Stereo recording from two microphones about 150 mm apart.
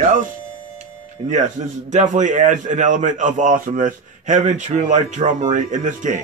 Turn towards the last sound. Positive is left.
turn(degrees=-55)  # may be behind; listen again after turning